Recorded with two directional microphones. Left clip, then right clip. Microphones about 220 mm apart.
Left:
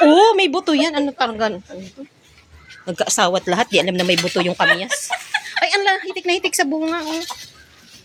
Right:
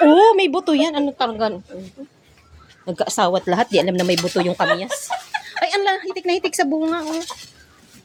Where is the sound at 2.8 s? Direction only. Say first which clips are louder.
Left 1 dB; 5° right (ahead or behind).